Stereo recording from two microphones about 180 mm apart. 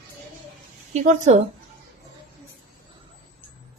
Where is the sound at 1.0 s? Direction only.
40° right (ahead or behind).